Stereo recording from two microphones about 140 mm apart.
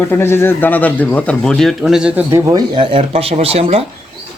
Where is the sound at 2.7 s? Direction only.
40° right (ahead or behind).